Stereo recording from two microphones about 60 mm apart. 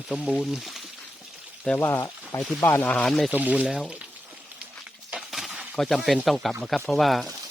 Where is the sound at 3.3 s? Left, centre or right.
Right.